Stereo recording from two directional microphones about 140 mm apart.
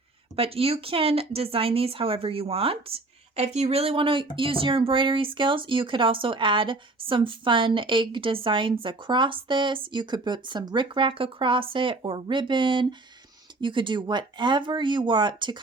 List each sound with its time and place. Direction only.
0.3 s speech: 45° right (ahead or behind)